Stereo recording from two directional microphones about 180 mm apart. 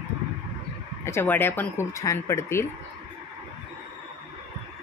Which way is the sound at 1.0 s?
10° left (ahead or behind).